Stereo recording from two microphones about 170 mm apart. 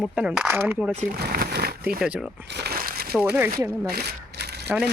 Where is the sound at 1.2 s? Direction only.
65° right (ahead or behind).